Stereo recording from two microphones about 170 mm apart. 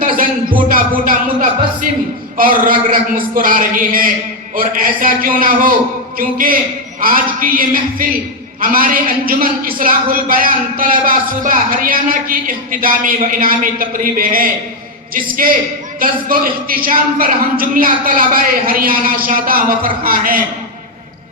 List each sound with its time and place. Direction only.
0.0 s music: 55° right (ahead or behind)
2.4 s speech: 55° right (ahead or behind)